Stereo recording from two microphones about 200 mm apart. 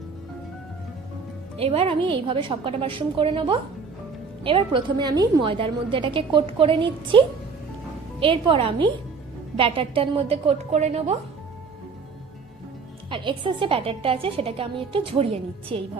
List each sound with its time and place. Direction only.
1.5 s a woman's voice: 30° right (ahead or behind)
13.1 s a woman's voice: 25° right (ahead or behind)